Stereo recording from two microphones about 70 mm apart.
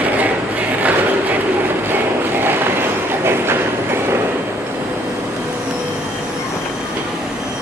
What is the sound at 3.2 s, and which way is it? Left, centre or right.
Train, right.